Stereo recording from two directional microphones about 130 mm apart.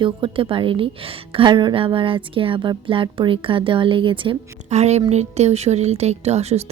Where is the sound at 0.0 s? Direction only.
40° right (ahead or behind).